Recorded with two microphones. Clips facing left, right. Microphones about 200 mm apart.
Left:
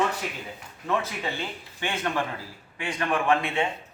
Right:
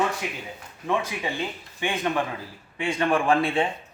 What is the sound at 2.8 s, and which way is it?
Speech, 25° right (ahead or behind).